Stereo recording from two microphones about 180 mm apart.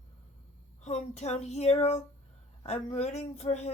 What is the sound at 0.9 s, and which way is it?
Speech, 40° left (ahead or behind).